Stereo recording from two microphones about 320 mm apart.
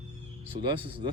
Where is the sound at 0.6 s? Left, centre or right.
Centre.